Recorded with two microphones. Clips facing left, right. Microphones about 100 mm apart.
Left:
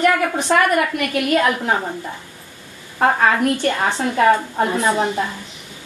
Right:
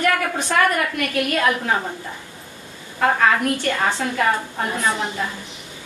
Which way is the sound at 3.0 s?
25° left (ahead or behind).